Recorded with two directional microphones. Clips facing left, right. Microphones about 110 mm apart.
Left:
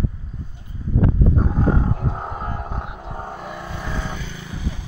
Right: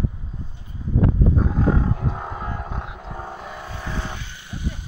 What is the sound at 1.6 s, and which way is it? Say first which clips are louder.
Roaring cats: left 1 dB; 25° left (ahead or behind).